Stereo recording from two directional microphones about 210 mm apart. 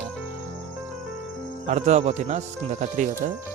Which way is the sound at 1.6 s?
35° right (ahead or behind).